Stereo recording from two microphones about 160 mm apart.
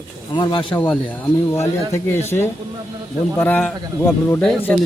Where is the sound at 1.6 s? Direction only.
15° left (ahead or behind).